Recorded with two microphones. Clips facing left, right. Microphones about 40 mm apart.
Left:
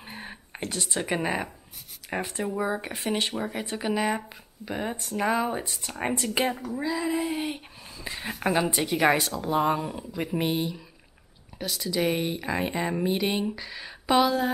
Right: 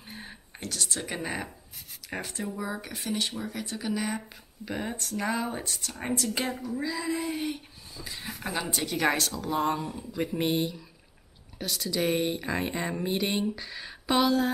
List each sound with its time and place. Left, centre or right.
0.0 s a sound: left
2.0 s speech: centre
4.6 s a woman's voice: centre
5.8 s a woman's voice: left; by 7.4 s centre
7.4 s speech: left
8.5 s a woman's voice: centre